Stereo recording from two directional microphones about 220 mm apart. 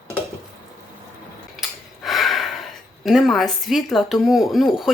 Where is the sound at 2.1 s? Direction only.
Centre (ahead or behind).